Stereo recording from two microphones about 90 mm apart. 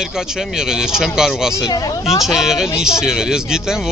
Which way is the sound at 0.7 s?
5° right (ahead or behind).